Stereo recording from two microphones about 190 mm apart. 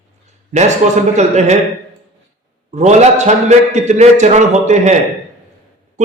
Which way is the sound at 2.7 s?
40° right (ahead or behind).